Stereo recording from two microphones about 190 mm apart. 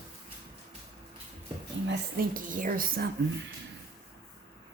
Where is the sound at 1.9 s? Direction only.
50° right (ahead or behind).